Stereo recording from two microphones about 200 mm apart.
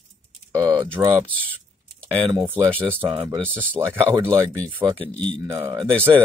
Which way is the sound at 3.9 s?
15° right (ahead or behind).